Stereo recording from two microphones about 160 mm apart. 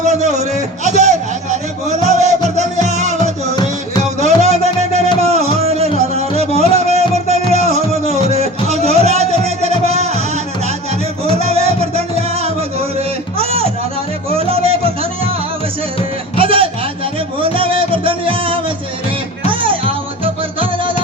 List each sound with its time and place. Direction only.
0.0 s a man's voice: 45° right (ahead or behind)
0.9 s music: 45° right (ahead or behind)
3.5 s music: 25° left (ahead or behind)
4.2 s music: 45° right (ahead or behind)
11.3 s music: 40° right (ahead or behind)
16.4 s music: 35° right (ahead or behind)